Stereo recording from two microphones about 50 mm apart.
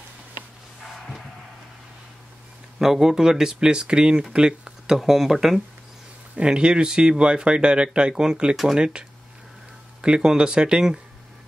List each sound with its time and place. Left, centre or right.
2.8 s speech: centre
6.3 s speech: centre
10.0 s speech: centre